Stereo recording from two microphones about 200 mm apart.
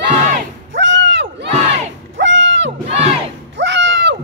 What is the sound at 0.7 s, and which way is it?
Crowd, 65° right (ahead or behind).